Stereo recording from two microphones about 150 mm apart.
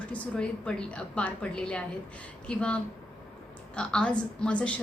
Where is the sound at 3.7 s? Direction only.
5° left (ahead or behind).